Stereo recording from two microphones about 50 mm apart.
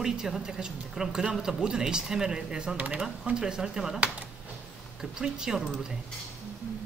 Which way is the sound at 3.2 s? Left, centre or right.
Centre.